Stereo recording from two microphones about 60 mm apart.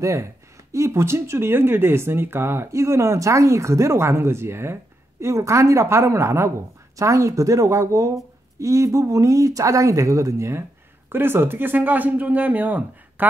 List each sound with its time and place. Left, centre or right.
0.0 s speech: right
5.2 s speech: right
7.0 s speech: right
11.1 s speech: right